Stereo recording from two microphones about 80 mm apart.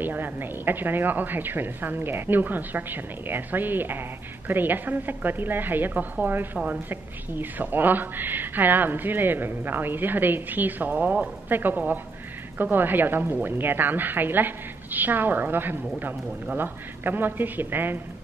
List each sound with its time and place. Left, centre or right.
0.0 s a woman's voice: right